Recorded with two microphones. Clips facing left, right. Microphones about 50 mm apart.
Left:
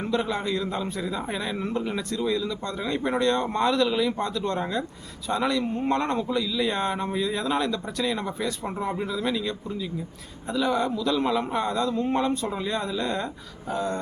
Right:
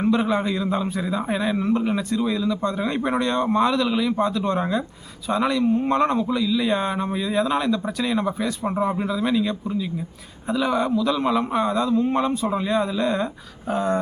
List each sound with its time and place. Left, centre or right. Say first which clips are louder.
0.0 s speech: right 6 dB; centre
4.4 s speech: right 4 dB; centre
13.7 s speech: right 5 dB; right